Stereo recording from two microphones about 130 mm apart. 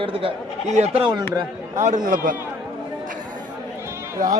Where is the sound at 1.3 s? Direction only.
25° right (ahead or behind).